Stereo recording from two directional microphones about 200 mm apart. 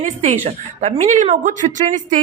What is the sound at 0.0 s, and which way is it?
A woman's voice, 35° right (ahead or behind).